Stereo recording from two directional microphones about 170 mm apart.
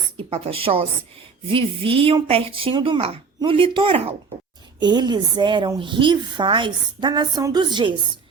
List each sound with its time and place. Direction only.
0.2 s a woman's voice: 35° right (ahead or behind)